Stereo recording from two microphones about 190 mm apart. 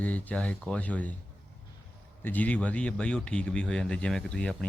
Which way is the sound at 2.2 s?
10° left (ahead or behind).